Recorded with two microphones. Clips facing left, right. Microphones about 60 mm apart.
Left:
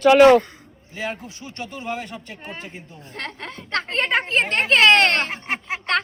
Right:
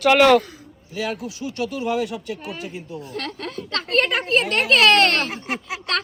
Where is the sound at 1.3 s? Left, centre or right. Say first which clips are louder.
Right 7 dB; left.